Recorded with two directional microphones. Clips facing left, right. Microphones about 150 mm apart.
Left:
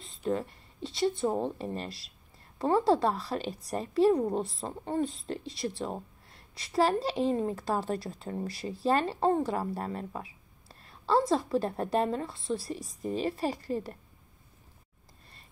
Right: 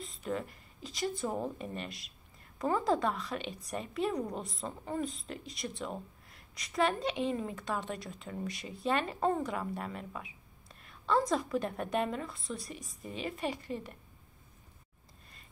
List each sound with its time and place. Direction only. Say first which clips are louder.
0.0 s speech: left 5 dB; 30° left (ahead or behind)